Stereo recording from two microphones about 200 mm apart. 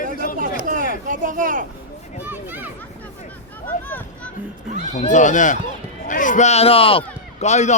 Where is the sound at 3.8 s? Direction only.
10° left (ahead or behind).